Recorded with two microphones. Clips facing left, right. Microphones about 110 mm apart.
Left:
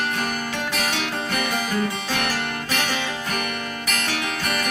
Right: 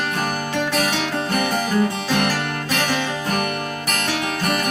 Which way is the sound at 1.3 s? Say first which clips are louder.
Right 4 dB; 40° right (ahead or behind).